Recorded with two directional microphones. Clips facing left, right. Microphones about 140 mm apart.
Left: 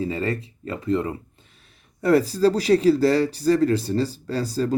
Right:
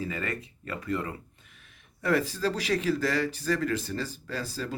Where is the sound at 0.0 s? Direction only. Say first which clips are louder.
Left 8 dB; 30° left (ahead or behind).